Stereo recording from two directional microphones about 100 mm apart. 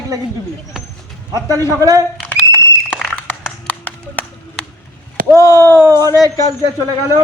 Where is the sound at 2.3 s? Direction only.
20° left (ahead or behind).